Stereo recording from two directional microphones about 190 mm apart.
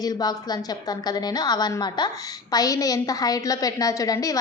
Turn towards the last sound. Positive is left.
turn(degrees=20)  # may be behind; listen again after turning